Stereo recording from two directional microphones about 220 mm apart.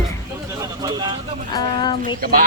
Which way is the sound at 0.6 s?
20° right (ahead or behind).